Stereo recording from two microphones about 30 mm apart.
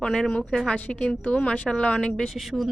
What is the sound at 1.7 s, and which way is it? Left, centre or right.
Speech, left.